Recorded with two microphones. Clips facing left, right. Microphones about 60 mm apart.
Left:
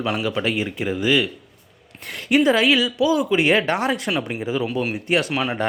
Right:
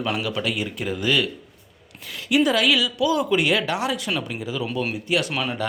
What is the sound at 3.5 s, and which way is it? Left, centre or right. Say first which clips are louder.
A man's voice: left 4 dB; left.